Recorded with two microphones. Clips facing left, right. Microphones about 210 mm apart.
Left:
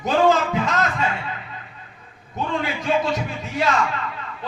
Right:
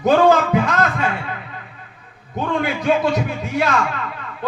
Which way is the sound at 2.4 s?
55° right (ahead or behind).